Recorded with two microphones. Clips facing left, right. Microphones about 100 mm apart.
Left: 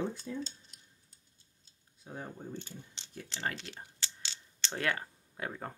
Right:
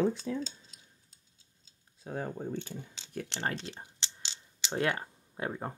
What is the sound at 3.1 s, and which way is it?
Speech, 65° right (ahead or behind).